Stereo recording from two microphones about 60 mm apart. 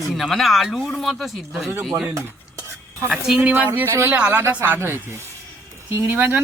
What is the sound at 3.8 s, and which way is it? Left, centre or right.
Speech, right.